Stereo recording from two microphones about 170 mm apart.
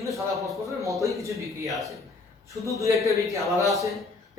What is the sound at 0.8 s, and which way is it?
Speech, 20° right (ahead or behind).